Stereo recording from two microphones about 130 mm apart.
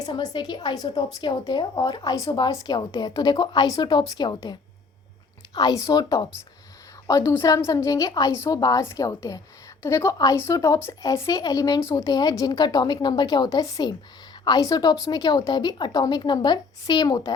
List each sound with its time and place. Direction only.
0.0 s a woman's voice: 35° left (ahead or behind)
5.5 s a woman's voice: 30° left (ahead or behind)